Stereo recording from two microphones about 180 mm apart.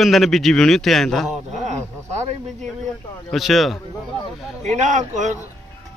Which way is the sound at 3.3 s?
Centre (ahead or behind).